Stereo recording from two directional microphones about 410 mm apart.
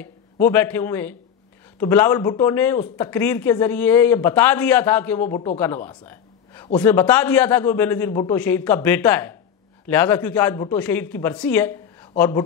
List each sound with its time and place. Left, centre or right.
0.0 s a man's voice: centre